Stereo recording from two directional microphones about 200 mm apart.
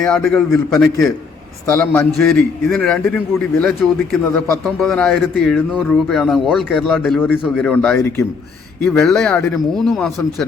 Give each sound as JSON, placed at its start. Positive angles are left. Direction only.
{"t": 0.2, "sound": "a man's voice", "side_deg": 5}